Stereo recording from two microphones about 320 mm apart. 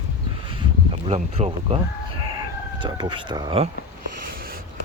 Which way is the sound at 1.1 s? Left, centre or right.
Centre.